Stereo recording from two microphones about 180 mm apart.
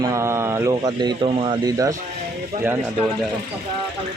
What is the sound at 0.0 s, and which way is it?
Speech, 15° right (ahead or behind).